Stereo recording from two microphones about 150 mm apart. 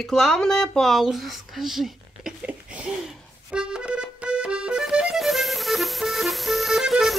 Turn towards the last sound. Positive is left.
turn(degrees=0)  # may be behind; listen again after turning